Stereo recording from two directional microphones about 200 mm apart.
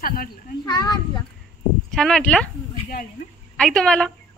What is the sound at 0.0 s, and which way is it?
Speech, 45° left (ahead or behind).